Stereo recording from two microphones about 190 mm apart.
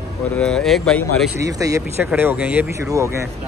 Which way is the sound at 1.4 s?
15° right (ahead or behind).